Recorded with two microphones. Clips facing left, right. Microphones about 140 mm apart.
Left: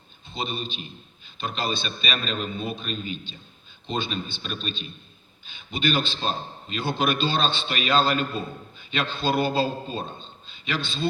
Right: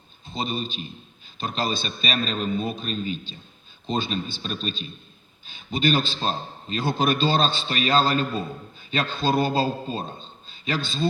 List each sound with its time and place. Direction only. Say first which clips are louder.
0.3 s a man's voice: right 3 dB; 40° right (ahead or behind)